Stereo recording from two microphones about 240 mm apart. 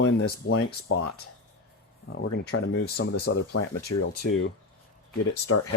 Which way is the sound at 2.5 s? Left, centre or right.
Left.